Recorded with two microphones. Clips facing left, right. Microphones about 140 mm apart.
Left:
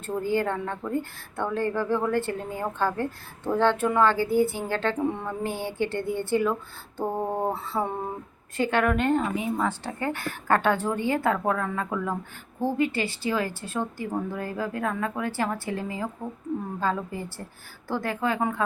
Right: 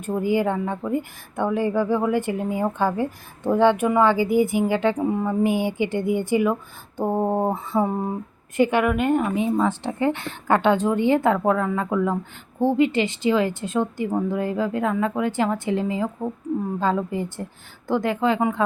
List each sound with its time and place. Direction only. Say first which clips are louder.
0.0 s a woman's voice: right 4 dB; 15° right (ahead or behind)